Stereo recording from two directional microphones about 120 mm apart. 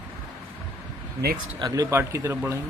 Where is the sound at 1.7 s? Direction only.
20° right (ahead or behind).